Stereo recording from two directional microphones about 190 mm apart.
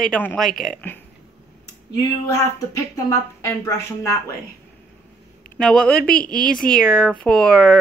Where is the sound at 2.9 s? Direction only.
15° left (ahead or behind).